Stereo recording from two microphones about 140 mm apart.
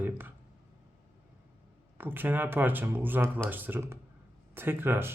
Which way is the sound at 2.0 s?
15° right (ahead or behind).